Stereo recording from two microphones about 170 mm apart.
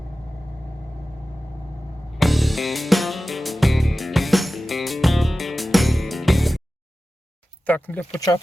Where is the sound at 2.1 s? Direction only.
Centre (ahead or behind).